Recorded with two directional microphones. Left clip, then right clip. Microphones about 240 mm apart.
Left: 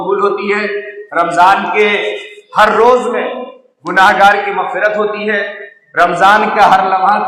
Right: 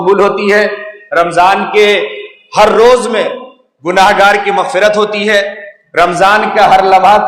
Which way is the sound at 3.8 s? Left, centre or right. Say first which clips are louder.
Right 1 dB; right.